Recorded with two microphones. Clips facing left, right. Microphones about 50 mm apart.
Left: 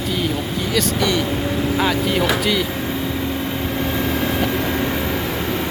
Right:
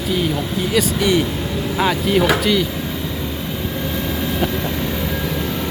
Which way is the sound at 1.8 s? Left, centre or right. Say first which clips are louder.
Right 4 dB; centre.